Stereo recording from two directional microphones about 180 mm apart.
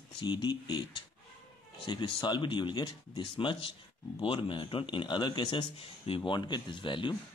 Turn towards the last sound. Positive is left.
turn(degrees=25)  # may be behind; listen again after turning